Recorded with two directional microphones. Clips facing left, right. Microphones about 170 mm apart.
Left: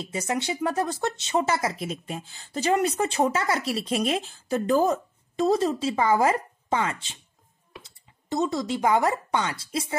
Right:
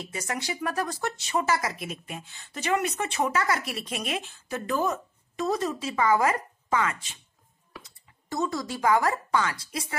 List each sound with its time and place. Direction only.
0.1 s speech: 25° left (ahead or behind)